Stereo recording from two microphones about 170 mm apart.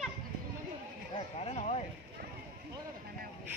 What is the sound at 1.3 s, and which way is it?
Speech, 40° left (ahead or behind).